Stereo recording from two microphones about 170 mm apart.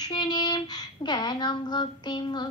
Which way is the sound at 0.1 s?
25° left (ahead or behind).